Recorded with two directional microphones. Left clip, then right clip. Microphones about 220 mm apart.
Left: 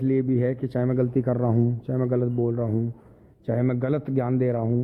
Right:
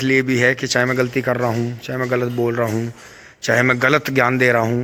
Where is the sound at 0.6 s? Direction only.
Centre (ahead or behind).